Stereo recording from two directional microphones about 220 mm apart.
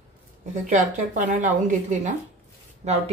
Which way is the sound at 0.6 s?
35° right (ahead or behind).